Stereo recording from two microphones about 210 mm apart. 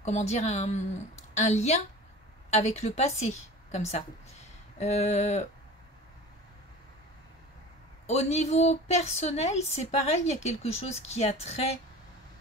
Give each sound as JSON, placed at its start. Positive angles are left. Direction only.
{"t": 0.0, "sound": "a woman's voice", "side_deg": 30}
{"t": 8.1, "sound": "a woman's voice", "side_deg": 30}